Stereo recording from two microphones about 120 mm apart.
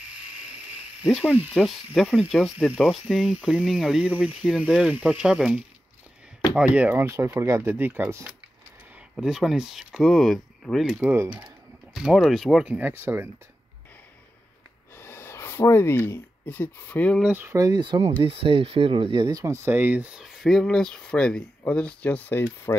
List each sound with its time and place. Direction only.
1.5 s speech: centre (ahead or behind); by 8.3 s 20° right (ahead or behind)
9.1 s speech: 5° right (ahead or behind)
11.0 s speech: 15° right (ahead or behind)
11.9 s speech: centre (ahead or behind)
12.7 s speech: 15° right (ahead or behind)
15.0 s speech: 20° left (ahead or behind)
17.2 s speech: 15° right (ahead or behind)
17.6 s speech: 35° right (ahead or behind)
18.2 s speech: 50° right (ahead or behind)
19.4 s speech: 20° right (ahead or behind); by 22.8 s 15° left (ahead or behind)